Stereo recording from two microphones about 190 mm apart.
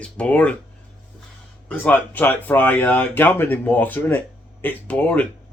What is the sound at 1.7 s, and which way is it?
Speech, 10° left (ahead or behind).